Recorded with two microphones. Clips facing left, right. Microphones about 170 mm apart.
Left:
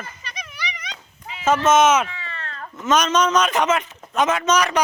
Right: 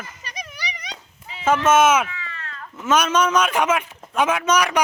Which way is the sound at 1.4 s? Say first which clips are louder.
Even; 10° right (ahead or behind).